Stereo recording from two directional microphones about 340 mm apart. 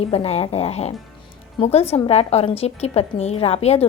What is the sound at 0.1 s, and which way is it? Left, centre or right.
A woman's voice, centre.